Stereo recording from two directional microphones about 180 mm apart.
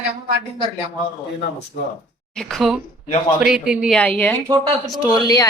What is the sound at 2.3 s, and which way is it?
Speech, centre (ahead or behind).